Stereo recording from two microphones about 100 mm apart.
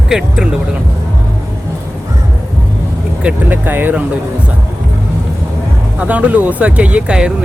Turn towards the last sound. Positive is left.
turn(degrees=-10)  # may be behind; listen again after turning